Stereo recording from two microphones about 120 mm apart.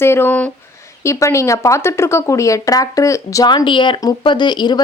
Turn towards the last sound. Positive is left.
turn(degrees=40)  # may be behind; listen again after turning